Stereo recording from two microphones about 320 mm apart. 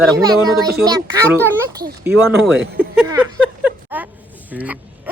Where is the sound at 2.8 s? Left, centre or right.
Centre.